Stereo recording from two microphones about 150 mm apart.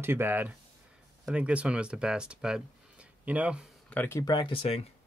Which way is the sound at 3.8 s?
15° left (ahead or behind).